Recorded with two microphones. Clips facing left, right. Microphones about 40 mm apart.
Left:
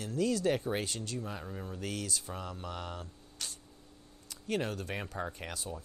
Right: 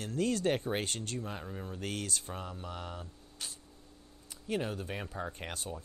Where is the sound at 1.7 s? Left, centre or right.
Right.